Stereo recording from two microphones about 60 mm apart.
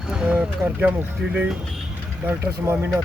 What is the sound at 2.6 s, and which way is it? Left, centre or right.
Speech, right.